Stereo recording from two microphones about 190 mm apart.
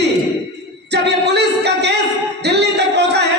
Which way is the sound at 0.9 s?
60° right (ahead or behind).